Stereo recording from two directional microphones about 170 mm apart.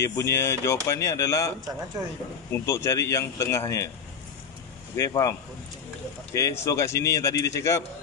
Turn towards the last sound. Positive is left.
turn(degrees=15)  # may be behind; listen again after turning